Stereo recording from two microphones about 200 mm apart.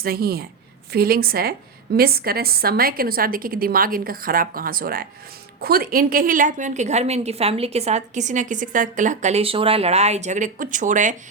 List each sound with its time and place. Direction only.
0.0 s a woman's voice: 50° right (ahead or behind)